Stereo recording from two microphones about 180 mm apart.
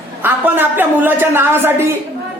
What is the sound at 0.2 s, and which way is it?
A woman's voice, 10° right (ahead or behind).